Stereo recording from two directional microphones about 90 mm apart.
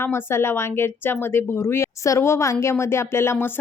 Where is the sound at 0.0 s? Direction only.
25° left (ahead or behind).